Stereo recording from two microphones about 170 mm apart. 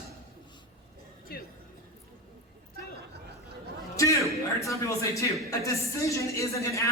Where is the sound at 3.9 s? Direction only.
20° left (ahead or behind).